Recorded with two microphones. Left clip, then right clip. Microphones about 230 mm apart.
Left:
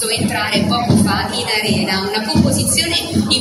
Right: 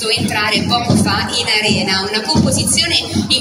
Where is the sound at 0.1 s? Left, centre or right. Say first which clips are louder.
Right 3 dB; right.